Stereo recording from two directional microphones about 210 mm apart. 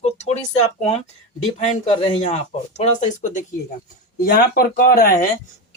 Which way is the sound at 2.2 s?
35° left (ahead or behind).